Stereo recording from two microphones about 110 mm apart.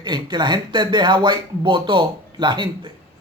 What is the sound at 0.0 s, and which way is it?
Speech, 45° right (ahead or behind).